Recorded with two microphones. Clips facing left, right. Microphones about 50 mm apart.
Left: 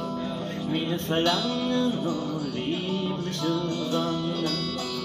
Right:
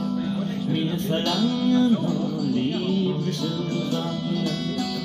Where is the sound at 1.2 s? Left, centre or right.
Left.